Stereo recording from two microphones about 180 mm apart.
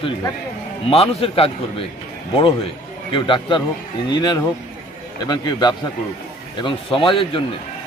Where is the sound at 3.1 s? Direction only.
25° left (ahead or behind).